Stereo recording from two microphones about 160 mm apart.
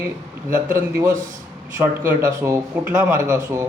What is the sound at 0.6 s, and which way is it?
Speech, 15° right (ahead or behind).